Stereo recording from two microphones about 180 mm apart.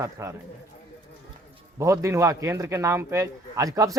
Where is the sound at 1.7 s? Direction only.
15° right (ahead or behind).